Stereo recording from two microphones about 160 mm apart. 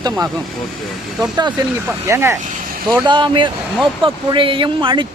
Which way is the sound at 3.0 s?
30° right (ahead or behind).